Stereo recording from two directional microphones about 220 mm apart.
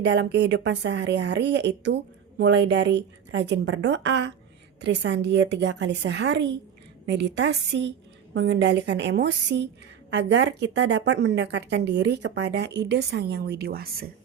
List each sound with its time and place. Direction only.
0.0 s a woman's voice: 50° right (ahead or behind)